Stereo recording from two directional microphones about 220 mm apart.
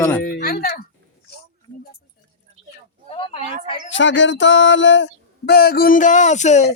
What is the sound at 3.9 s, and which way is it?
Speech, 55° left (ahead or behind).